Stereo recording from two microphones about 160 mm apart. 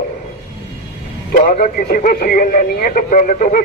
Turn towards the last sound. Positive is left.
turn(degrees=60)  # may be behind; listen again after turning